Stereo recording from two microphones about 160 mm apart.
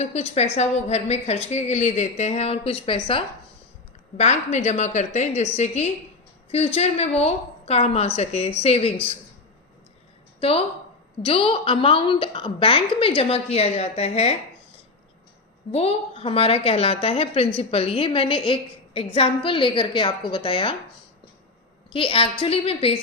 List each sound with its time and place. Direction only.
0.0 s a woman's voice: 40° left (ahead or behind)
4.2 s a woman's voice: 45° left (ahead or behind)
11.2 s a woman's voice: 35° left (ahead or behind)
15.7 s a woman's voice: 40° left (ahead or behind)
21.9 s a woman's voice: 35° left (ahead or behind)